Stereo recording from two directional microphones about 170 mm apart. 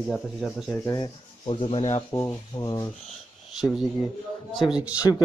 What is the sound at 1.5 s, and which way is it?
Speech, 35° left (ahead or behind).